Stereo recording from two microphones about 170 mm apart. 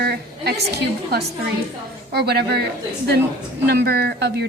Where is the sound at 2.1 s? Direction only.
75° right (ahead or behind).